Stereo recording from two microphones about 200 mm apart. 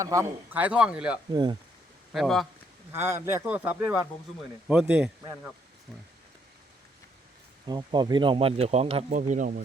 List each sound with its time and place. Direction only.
0.0 s a man's voice: 15° right (ahead or behind)
1.3 s speech: 20° right (ahead or behind)
2.1 s speech: centre (ahead or behind)
2.9 s a man's voice: 10° right (ahead or behind)
7.7 s speech: 20° right (ahead or behind); by 9.6 s 40° right (ahead or behind)